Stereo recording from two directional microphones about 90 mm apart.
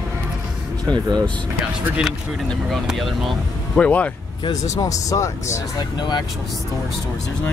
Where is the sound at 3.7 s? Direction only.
15° left (ahead or behind).